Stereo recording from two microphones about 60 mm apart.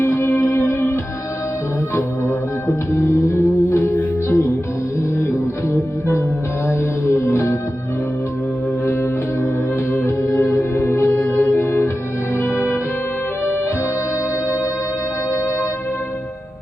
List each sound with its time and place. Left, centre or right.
0.0 s music: left
2.6 s music: left
6.7 s music: left
8.9 s music: left